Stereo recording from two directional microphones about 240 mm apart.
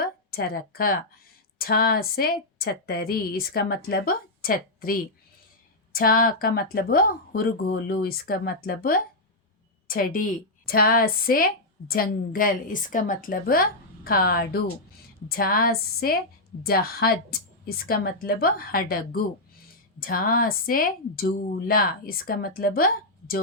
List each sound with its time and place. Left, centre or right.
0.3 s a woman's voice: left